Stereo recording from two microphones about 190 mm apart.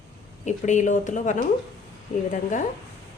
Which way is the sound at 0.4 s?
40° left (ahead or behind).